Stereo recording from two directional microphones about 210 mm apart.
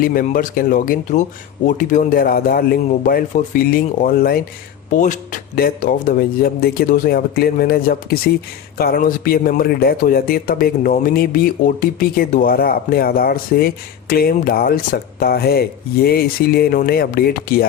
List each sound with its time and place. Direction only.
0.0 s speech: 45° left (ahead or behind)
5.5 s speech: 40° left (ahead or behind)